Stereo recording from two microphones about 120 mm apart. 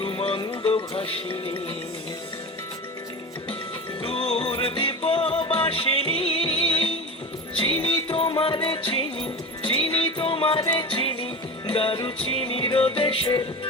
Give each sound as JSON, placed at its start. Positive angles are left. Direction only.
{"t": 0.0, "sound": "music", "side_deg": 50}
{"t": 4.0, "sound": "music", "side_deg": 50}